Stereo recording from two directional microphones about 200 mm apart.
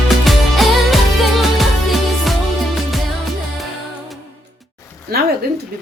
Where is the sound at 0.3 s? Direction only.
Centre (ahead or behind).